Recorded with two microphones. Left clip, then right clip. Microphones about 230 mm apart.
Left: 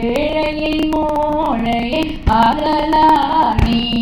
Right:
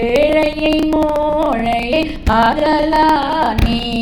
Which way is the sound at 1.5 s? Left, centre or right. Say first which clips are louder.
Right 2 dB; right.